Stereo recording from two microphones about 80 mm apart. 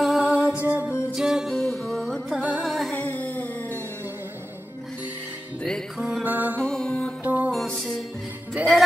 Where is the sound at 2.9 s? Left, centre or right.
Centre.